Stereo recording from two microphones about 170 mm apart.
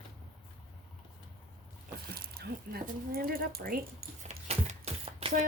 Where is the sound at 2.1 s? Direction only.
65° right (ahead or behind).